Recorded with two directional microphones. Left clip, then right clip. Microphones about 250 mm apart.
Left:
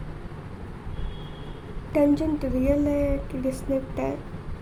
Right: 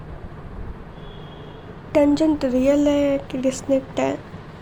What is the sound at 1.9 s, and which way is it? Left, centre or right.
A woman's voice, centre.